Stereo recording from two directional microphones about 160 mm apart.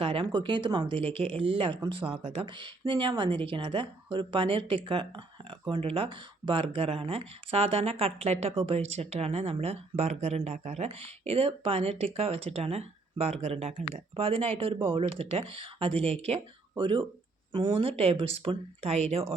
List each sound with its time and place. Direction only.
0.0 s speech: 35° right (ahead or behind)